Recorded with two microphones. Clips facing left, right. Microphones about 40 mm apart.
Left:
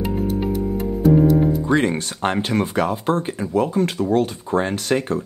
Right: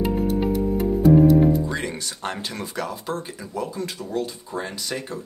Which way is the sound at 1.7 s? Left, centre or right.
Left.